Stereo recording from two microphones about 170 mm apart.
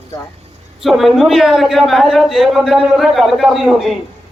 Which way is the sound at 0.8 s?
Centre (ahead or behind).